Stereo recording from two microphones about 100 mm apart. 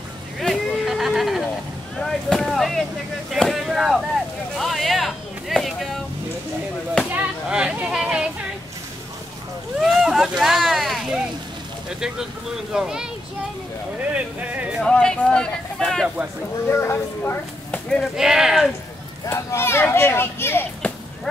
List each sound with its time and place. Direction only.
0.4 s a sound: centre (ahead or behind)
2.0 s boat: 5° left (ahead or behind)
4.6 s a sound: centre (ahead or behind)
7.1 s a sound: 15° right (ahead or behind)
9.8 s speech: 5° right (ahead or behind)
12.7 s speech: 5° right (ahead or behind)
14.1 s speech: 15° right (ahead or behind)
14.8 s speech: 5° left (ahead or behind)
16.6 s speech: 25° left (ahead or behind)
18.1 s speech: 5° right (ahead or behind)
19.2 s speech: 25° left (ahead or behind)
20.8 s a sound: 15° left (ahead or behind)